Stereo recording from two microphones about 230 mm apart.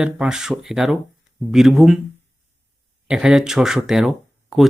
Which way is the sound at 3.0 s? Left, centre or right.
Centre.